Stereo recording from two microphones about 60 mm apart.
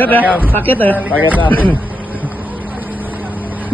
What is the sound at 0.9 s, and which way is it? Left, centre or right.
Speech, right.